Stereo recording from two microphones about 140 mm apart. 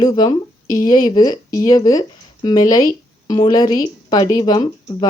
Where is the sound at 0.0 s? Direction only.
30° left (ahead or behind).